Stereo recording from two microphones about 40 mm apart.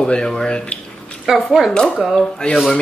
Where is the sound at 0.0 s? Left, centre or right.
Centre.